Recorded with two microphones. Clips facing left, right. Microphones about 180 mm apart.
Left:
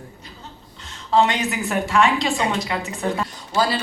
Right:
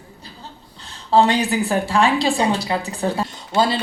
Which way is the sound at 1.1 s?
35° right (ahead or behind).